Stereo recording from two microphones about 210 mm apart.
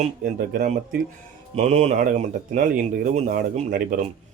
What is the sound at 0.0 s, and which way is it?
Speech, 40° right (ahead or behind).